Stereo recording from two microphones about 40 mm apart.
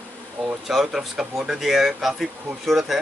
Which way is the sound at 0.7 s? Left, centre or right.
Centre.